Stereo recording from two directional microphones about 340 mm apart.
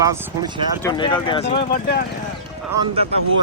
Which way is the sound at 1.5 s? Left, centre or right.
Left.